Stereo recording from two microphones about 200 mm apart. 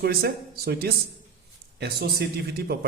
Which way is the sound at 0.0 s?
50° right (ahead or behind).